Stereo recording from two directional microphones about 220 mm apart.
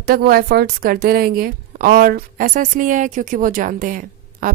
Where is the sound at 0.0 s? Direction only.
45° right (ahead or behind).